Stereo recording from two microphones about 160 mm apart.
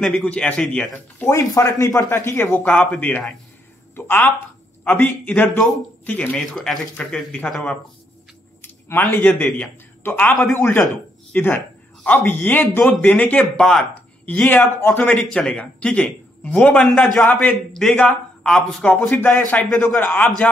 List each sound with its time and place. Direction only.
0.0 s speech: 5° left (ahead or behind)
1.2 s speech: 20° left (ahead or behind)
2.6 s speech: 5° left (ahead or behind)
8.8 s speech: 15° left (ahead or behind)